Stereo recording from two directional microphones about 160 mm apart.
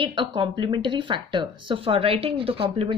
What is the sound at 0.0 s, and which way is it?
Speech, 30° right (ahead or behind).